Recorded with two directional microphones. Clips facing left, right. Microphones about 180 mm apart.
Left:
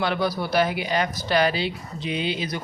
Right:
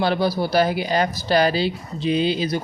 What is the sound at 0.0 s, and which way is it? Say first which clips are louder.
Speech: right 4 dB; 30° right (ahead or behind).